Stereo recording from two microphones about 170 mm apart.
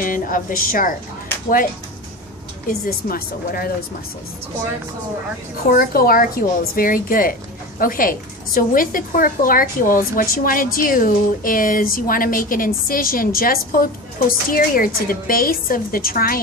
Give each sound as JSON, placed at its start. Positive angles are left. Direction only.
{"t": 0.0, "sound": "a woman's voice", "side_deg": 55}
{"t": 2.7, "sound": "a woman's voice", "side_deg": 60}
{"t": 5.7, "sound": "a woman's voice", "side_deg": 60}